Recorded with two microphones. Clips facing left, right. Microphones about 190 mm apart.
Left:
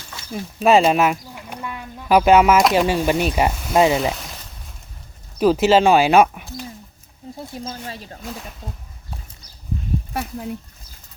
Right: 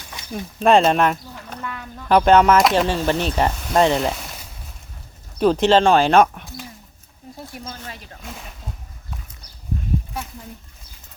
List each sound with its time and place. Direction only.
0.2 s a sound: 15° right (ahead or behind)
0.6 s speech: 5° left (ahead or behind)
7.5 s speech: 30° left (ahead or behind)
10.1 s speech: 60° left (ahead or behind)